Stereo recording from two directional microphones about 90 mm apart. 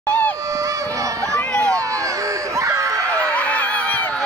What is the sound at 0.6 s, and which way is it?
Honk, 35° right (ahead or behind).